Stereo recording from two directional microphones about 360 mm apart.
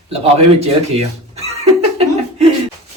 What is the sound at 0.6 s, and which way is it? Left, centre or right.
Chuckle, centre.